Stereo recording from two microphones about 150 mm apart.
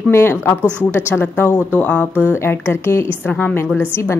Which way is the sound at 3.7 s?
10° right (ahead or behind).